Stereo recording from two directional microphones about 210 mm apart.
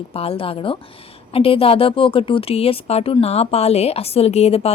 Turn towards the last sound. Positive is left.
turn(degrees=30)  # may be behind; listen again after turning